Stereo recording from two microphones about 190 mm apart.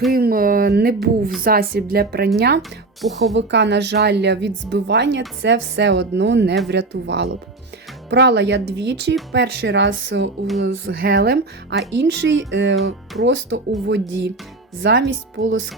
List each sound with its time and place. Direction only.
0.1 s speech: 50° right (ahead or behind)
2.6 s speech: centre (ahead or behind)
3.3 s speech: 65° right (ahead or behind)
10.6 s speech: 55° right (ahead or behind)
11.9 s speech: 70° right (ahead or behind); by 15.7 s 85° right